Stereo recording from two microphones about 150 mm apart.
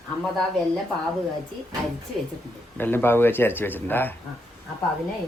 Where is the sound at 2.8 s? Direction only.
15° left (ahead or behind).